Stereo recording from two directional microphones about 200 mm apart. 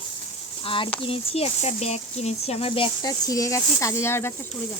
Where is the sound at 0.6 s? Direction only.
25° left (ahead or behind).